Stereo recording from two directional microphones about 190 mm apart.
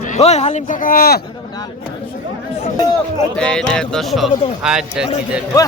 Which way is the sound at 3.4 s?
5° left (ahead or behind).